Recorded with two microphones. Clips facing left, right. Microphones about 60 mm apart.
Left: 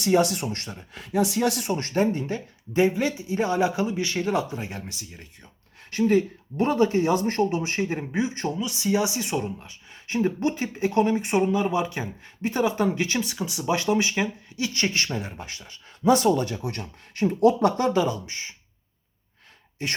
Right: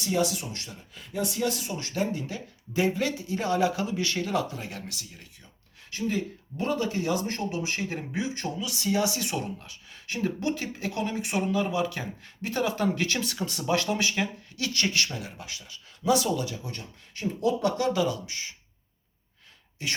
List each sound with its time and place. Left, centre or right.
0.0 s speech: left
0.9 s speech: left
1.4 s speech: left
1.9 s speech: left
5.9 s speech: left
17.7 s speech: left
19.8 s speech: left